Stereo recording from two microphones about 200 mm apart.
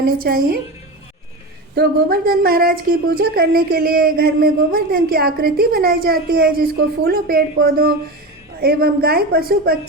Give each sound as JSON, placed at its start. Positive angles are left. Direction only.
{"t": 0.2, "sound": "a woman's voice", "side_deg": -45}
{"t": 1.7, "sound": "a woman's voice", "side_deg": -50}